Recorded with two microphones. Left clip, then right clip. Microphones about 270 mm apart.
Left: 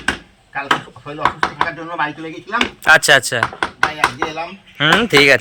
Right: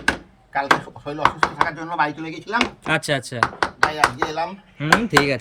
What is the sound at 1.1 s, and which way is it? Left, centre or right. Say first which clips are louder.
Speech: left 1 dB; centre.